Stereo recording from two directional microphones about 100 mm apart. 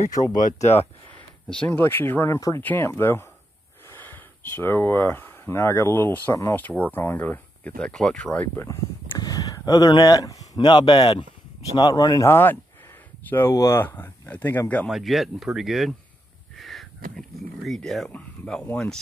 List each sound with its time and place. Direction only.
0.1 s speech: 40° left (ahead or behind)
1.7 s speech: 20° left (ahead or behind)
8.4 s speech: 25° left (ahead or behind)
9.2 s speech: 40° left (ahead or behind)
10.6 s speech: 55° left (ahead or behind)
11.7 s speech: 40° left (ahead or behind)
12.3 s speech: 20° left (ahead or behind)
14.9 s speech: centre (ahead or behind)